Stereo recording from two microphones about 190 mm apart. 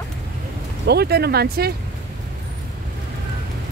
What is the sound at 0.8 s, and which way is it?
Speech, 55° right (ahead or behind).